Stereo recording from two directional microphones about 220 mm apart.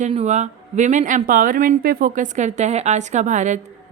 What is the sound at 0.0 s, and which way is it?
Speech, 30° right (ahead or behind).